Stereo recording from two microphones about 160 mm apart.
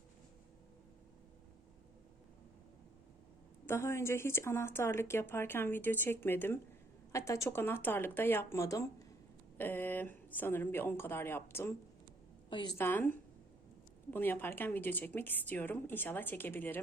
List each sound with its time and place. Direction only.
3.7 s speech: 15° left (ahead or behind)
12.5 s a woman's voice: 30° left (ahead or behind)
12.7 s speech: 10° left (ahead or behind)